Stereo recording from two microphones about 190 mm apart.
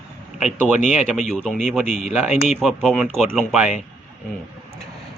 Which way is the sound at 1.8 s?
40° left (ahead or behind).